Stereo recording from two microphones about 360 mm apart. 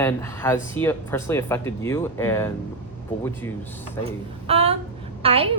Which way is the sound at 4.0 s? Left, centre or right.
Centre.